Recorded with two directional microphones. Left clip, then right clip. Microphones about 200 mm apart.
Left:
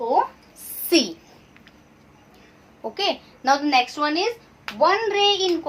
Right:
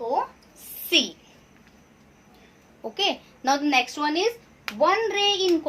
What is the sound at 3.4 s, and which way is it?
A woman's voice, 30° right (ahead or behind).